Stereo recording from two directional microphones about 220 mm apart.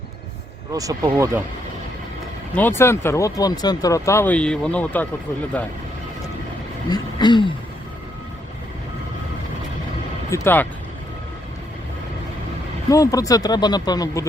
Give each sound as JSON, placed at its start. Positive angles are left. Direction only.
{"t": 0.7, "sound": "speech", "side_deg": -15}
{"t": 2.6, "sound": "speech", "side_deg": 10}
{"t": 6.9, "sound": "speech", "side_deg": 20}
{"t": 10.2, "sound": "speech", "side_deg": 10}
{"t": 12.9, "sound": "speech", "side_deg": 15}